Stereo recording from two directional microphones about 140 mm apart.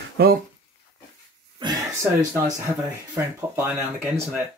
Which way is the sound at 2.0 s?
20° right (ahead or behind).